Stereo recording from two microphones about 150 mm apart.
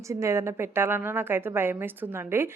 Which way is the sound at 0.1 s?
20° right (ahead or behind).